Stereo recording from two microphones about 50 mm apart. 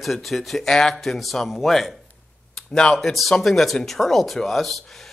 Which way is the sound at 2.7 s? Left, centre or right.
Centre.